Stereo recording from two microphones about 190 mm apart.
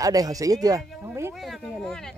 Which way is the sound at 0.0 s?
20° right (ahead or behind).